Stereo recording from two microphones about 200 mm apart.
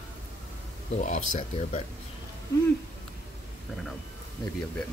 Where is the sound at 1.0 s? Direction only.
35° left (ahead or behind).